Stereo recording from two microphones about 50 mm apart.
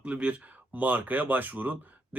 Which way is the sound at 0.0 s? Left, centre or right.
Right.